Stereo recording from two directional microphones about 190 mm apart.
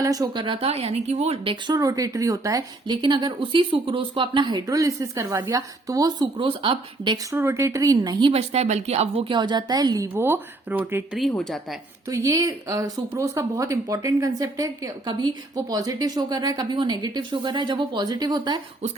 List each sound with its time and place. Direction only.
0.0 s a woman's voice: 20° right (ahead or behind)
7.3 s speech: 15° right (ahead or behind)
8.3 s a woman's voice: 35° right (ahead or behind); by 11.6 s centre (ahead or behind)
12.0 s a woman's voice: 15° right (ahead or behind)